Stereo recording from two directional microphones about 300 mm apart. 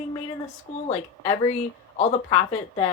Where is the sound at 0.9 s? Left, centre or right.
Centre.